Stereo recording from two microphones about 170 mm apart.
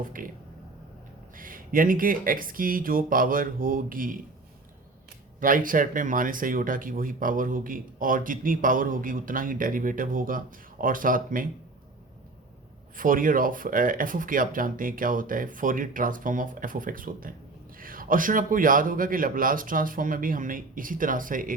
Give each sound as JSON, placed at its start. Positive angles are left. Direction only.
{"t": 0.2, "sound": "speech", "side_deg": -55}
{"t": 1.4, "sound": "speech", "side_deg": -55}
{"t": 5.4, "sound": "speech", "side_deg": -55}
{"t": 13.0, "sound": "speech", "side_deg": -55}